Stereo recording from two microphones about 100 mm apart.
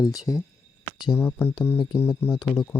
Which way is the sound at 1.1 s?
25° left (ahead or behind).